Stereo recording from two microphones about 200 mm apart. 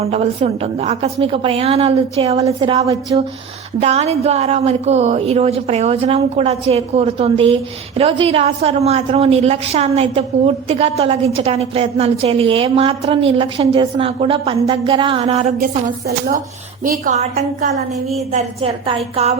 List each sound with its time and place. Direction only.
0.0 s a woman's voice: 30° right (ahead or behind)
15.6 s a woman's voice: 45° right (ahead or behind); by 19.3 s 30° right (ahead or behind)